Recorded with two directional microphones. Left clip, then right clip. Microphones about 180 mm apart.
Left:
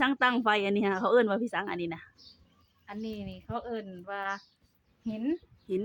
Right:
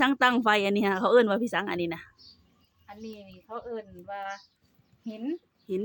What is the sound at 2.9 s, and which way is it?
A woman's voice, 30° left (ahead or behind).